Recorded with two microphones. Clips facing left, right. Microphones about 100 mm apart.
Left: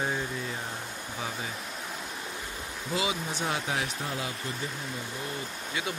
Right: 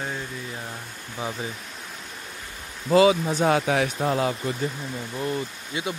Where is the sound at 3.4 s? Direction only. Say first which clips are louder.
Right 10 dB; 90° right.